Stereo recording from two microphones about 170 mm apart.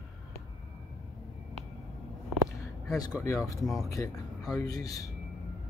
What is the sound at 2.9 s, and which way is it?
A man's voice, 15° left (ahead or behind).